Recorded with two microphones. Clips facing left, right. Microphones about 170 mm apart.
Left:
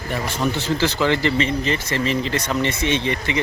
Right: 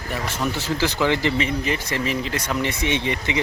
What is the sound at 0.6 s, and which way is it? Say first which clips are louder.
Speech: even; 10° right (ahead or behind).